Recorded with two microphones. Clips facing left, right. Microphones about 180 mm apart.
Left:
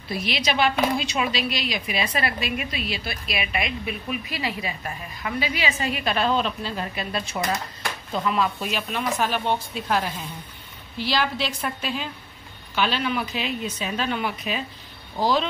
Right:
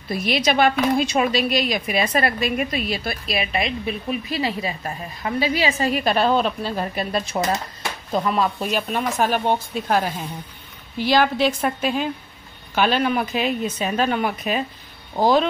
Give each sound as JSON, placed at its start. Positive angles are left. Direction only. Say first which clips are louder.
{"t": 0.1, "sound": "a woman's voice", "louder": "right 5 dB", "side_deg": -45}